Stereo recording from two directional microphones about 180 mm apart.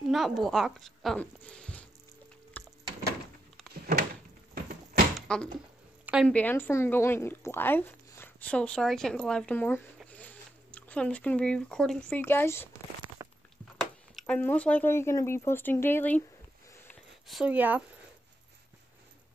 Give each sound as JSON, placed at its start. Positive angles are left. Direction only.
{"t": 0.0, "sound": "speech", "side_deg": 0}
{"t": 2.6, "sound": "wood", "side_deg": 10}
{"t": 3.7, "sound": "door", "side_deg": -55}
{"t": 5.3, "sound": "speech", "side_deg": 5}
{"t": 13.2, "sound": "a sound", "side_deg": -15}
{"t": 13.7, "sound": "speech", "side_deg": 5}
{"t": 17.3, "sound": "speech", "side_deg": -5}